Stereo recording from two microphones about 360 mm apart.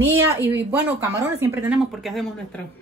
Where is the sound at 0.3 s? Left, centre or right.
Centre.